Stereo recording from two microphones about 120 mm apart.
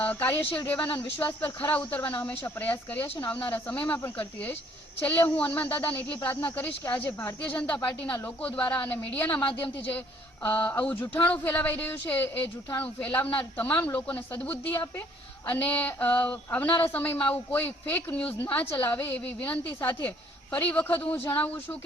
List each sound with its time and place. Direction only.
0.0 s speech: 15° left (ahead or behind)